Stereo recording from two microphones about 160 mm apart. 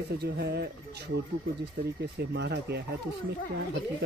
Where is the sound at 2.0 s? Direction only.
90° right.